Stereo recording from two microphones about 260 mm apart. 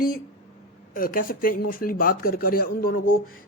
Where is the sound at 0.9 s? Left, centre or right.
Left.